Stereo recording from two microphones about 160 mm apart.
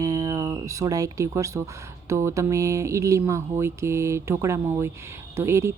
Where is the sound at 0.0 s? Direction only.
20° right (ahead or behind).